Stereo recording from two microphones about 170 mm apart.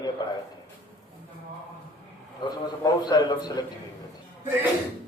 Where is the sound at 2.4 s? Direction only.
25° left (ahead or behind).